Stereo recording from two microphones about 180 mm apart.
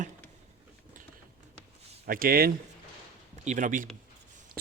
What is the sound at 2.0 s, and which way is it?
Speech, 55° right (ahead or behind).